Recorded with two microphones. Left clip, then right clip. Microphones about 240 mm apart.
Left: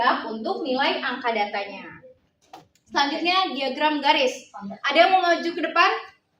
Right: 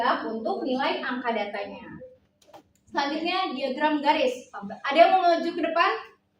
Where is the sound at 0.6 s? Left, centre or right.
Left.